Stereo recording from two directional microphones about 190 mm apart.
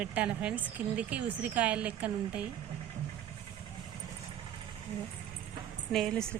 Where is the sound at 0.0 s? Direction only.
10° right (ahead or behind).